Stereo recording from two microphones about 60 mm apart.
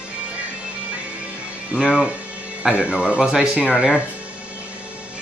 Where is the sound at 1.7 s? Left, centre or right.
Centre.